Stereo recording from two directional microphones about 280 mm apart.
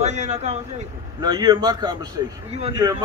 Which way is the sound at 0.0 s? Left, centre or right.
Right.